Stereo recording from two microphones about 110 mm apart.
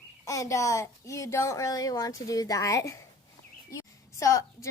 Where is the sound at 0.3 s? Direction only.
30° left (ahead or behind).